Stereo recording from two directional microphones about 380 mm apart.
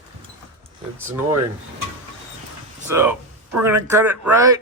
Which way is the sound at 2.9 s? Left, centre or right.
Centre.